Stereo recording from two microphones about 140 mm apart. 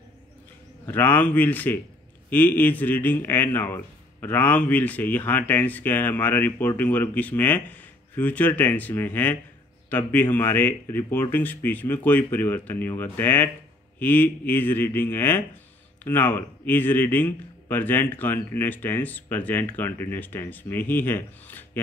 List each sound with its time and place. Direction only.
0.8 s a man's voice: 15° left (ahead or behind)